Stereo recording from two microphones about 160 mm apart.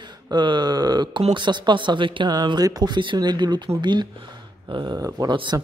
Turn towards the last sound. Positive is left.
turn(degrees=-25)  # may be behind; listen again after turning